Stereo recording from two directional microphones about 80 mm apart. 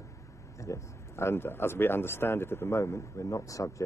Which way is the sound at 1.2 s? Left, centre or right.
Left.